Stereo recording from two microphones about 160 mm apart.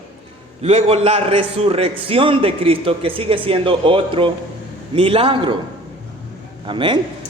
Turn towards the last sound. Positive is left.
turn(degrees=-30)  # may be behind; listen again after turning